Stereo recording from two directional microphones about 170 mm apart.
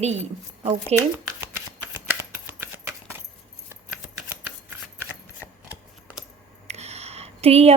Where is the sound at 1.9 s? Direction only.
10° right (ahead or behind).